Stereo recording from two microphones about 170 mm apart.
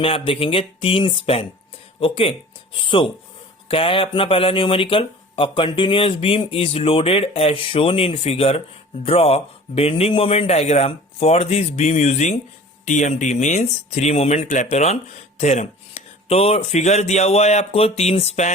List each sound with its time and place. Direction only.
0.0 s speech: 30° left (ahead or behind)